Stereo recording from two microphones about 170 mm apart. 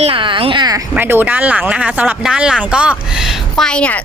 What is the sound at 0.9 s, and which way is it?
Speech, 10° right (ahead or behind).